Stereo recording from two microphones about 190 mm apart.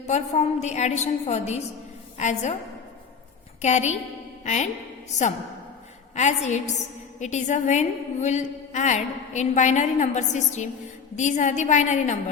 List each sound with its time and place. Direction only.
0.1 s a woman's voice: 35° left (ahead or behind)
3.6 s a woman's voice: 35° left (ahead or behind)
6.1 s a woman's voice: 40° left (ahead or behind)